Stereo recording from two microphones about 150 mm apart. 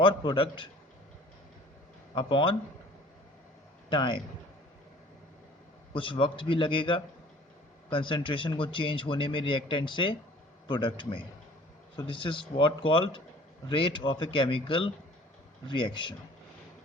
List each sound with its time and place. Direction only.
0.0 s speech: 30° left (ahead or behind)
2.1 s speech: 35° left (ahead or behind)
3.8 s speech: 30° left (ahead or behind)
5.9 s speech: 35° left (ahead or behind)